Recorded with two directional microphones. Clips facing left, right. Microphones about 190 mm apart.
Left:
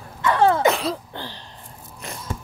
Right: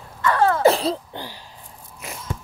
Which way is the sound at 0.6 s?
30° right (ahead or behind).